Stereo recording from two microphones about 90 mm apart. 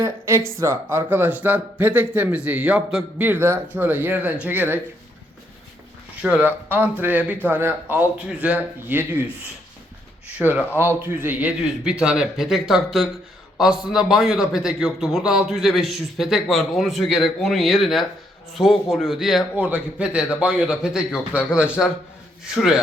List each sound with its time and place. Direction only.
0.0 s speech: 30° right (ahead or behind)
6.2 s speech: 15° right (ahead or behind)
8.3 s a man's voice: 10° right (ahead or behind)
10.3 s a man's voice: 20° right (ahead or behind); by 19.5 s centre (ahead or behind)
19.5 s a man's voice: 15° right (ahead or behind)